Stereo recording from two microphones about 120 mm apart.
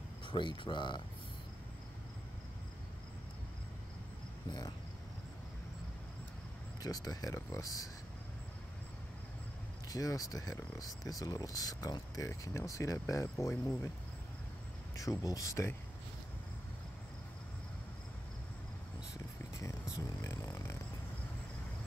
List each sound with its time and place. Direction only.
0.3 s speech: 45° left (ahead or behind)
4.5 s cricket: 35° left (ahead or behind)
6.8 s speech: 30° left (ahead or behind)
9.8 s speech: 30° left (ahead or behind)
15.0 s speech: 30° left (ahead or behind)
20.2 s music: 30° left (ahead or behind)